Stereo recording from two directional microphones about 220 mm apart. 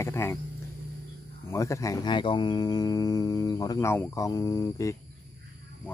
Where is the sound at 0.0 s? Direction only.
10° left (ahead or behind).